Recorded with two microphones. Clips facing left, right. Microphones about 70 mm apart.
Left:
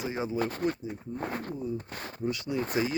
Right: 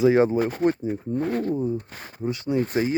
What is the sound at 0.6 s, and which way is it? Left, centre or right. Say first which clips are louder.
Speech: right 8 dB; right.